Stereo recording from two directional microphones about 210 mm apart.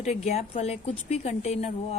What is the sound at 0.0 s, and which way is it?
A woman's voice, 30° left (ahead or behind).